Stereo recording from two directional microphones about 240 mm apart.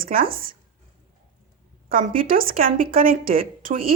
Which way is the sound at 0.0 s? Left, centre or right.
Right.